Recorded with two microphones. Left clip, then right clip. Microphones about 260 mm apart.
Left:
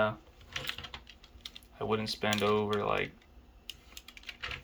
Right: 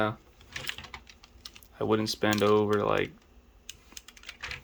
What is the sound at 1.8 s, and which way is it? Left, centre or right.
Speech, right.